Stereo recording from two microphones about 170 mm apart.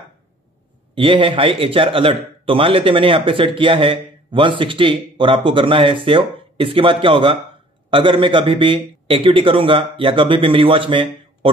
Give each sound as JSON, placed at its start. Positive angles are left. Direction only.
{"t": 0.9, "sound": "a man's voice", "side_deg": -30}